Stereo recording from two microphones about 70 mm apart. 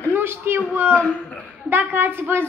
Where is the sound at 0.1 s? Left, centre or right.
Right.